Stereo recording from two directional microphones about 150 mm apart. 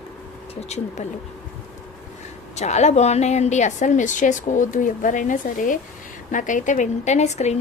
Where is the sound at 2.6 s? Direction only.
50° left (ahead or behind).